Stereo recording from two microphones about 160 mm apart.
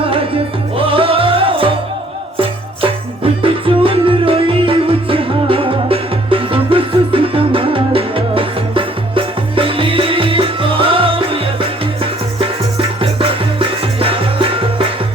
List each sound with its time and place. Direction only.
0.8 s music: 35° right (ahead or behind)
12.4 s music: 35° right (ahead or behind)